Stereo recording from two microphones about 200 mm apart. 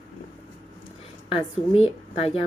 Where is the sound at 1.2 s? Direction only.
30° left (ahead or behind).